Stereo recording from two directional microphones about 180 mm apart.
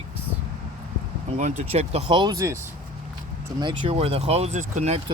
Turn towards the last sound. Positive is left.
turn(degrees=-40)  # may be behind; listen again after turning